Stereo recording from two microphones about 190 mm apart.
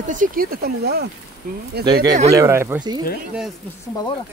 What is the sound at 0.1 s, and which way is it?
Speech, 45° right (ahead or behind).